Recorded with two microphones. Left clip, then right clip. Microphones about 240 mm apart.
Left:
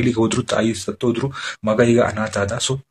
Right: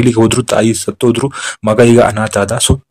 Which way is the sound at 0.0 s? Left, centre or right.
Right.